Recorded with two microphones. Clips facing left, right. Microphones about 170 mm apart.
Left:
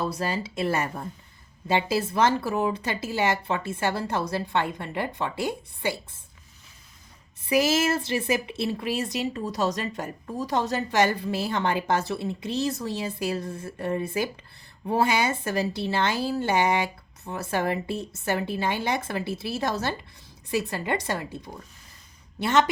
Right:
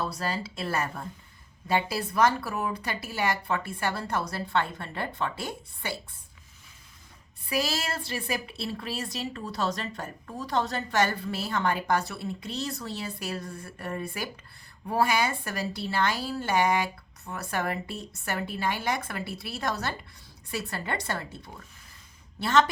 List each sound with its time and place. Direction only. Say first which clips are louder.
0.0 s speech: left 3 dB; 20° left (ahead or behind)
7.4 s a woman's voice: left 8 dB; 20° left (ahead or behind)